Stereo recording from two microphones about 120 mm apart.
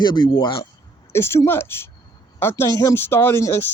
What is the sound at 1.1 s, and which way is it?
A man's voice, 20° left (ahead or behind).